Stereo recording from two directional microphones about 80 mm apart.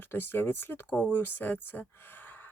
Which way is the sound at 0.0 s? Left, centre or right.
Left.